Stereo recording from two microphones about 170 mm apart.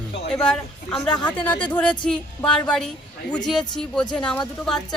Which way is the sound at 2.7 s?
5° left (ahead or behind).